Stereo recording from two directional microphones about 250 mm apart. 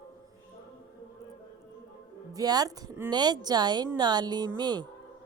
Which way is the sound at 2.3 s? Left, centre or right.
Centre.